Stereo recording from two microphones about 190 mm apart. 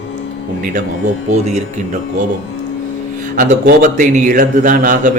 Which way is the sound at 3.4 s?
45° right (ahead or behind).